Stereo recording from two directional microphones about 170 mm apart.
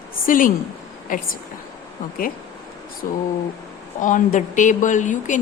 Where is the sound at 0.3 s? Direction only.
55° left (ahead or behind).